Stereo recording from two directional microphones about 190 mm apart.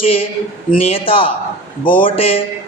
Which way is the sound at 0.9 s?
30° left (ahead or behind).